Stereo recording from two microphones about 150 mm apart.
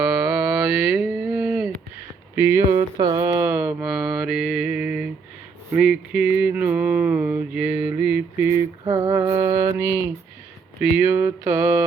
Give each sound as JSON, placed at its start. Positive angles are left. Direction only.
{"t": 0.0, "sound": "mantra", "side_deg": -10}
{"t": 2.3, "sound": "speech", "side_deg": -15}
{"t": 2.6, "sound": "a sound", "side_deg": -30}
{"t": 3.5, "sound": "mantra", "side_deg": -10}
{"t": 8.4, "sound": "a sound", "side_deg": -20}
{"t": 9.3, "sound": "mantra", "side_deg": -30}
{"t": 9.7, "sound": "mantra", "side_deg": -15}